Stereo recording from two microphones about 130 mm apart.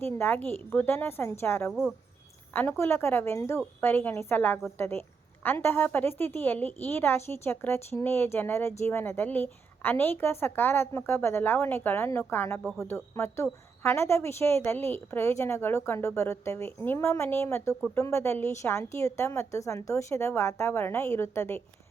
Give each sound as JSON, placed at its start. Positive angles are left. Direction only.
{"t": 0.0, "sound": "a woman's voice", "side_deg": 15}